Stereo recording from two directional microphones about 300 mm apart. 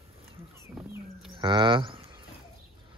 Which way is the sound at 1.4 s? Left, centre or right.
Centre.